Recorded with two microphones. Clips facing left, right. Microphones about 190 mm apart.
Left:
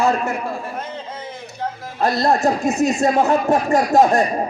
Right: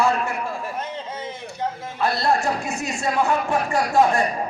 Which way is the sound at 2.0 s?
40° left (ahead or behind).